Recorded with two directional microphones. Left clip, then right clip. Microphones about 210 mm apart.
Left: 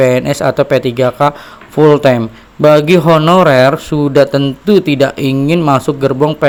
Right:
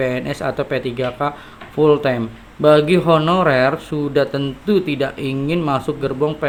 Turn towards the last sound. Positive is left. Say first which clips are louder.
# left 8 dB
turn(degrees=40)  # may be behind; listen again after turning